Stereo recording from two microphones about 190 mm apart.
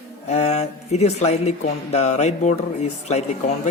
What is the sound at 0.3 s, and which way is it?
Speech, 35° left (ahead or behind).